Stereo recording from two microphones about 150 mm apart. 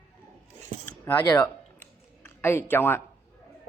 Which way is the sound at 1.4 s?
15° left (ahead or behind).